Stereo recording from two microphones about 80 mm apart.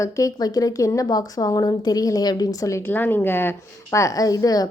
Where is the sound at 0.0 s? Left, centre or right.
Left.